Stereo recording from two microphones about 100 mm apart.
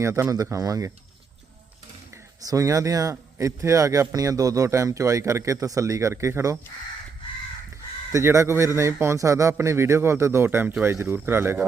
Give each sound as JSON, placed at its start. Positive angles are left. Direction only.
{"t": 0.0, "sound": "a man's voice", "side_deg": -30}
{"t": 2.4, "sound": "speech", "side_deg": -35}
{"t": 8.1, "sound": "a man's voice", "side_deg": -30}